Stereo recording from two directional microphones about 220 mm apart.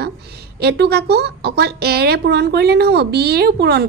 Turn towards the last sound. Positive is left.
turn(degrees=-50)  # may be behind; listen again after turning